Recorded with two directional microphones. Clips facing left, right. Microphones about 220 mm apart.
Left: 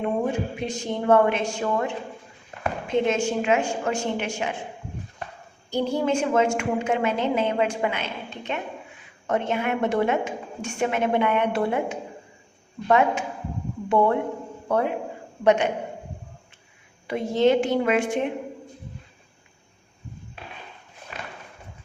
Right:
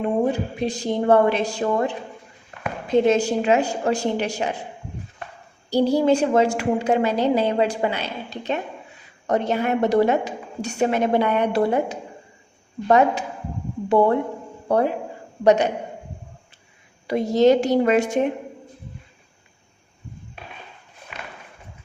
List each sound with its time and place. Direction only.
0.3 s a woman's voice: 35° right (ahead or behind)
5.7 s a woman's voice: 35° right (ahead or behind)
17.1 s a woman's voice: 40° right (ahead or behind)